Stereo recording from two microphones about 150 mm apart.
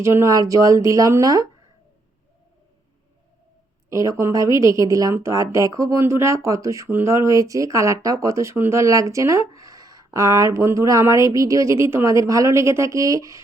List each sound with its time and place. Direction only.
0.0 s a woman's voice: 20° right (ahead or behind)
3.8 s a woman's voice: 20° right (ahead or behind)